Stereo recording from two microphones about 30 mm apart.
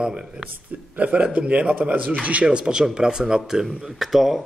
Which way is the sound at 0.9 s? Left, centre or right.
Right.